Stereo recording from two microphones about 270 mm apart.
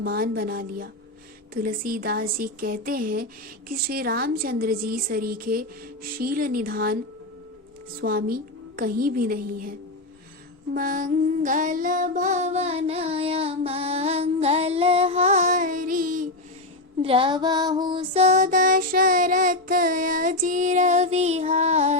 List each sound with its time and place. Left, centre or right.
0.0 s a woman's voice: right
8.0 s a woman's voice: right
10.8 s music: right
17.0 s music: centre